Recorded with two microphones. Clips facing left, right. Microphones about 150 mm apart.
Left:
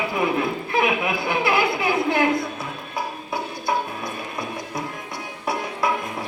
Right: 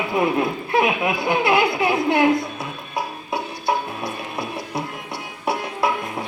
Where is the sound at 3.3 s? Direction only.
25° right (ahead or behind).